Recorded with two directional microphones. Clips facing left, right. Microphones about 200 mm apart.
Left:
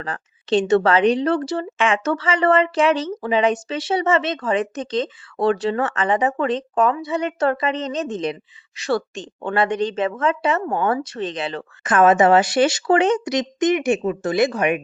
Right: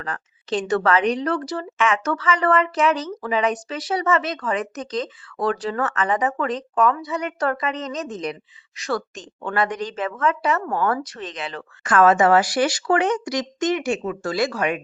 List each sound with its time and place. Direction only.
0.0 s speech: 30° left (ahead or behind)
11.8 s speech: 20° left (ahead or behind)